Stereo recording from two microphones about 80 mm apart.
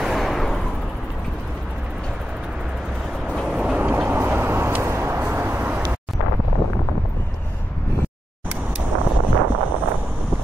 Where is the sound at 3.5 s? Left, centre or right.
Centre.